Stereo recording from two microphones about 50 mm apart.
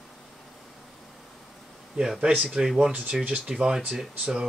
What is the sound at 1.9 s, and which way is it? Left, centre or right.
Speech, centre.